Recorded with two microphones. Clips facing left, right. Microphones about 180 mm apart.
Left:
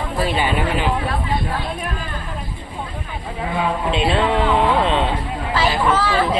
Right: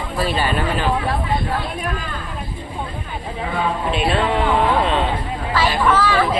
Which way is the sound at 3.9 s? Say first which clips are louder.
Left 1 dB; 25° left (ahead or behind).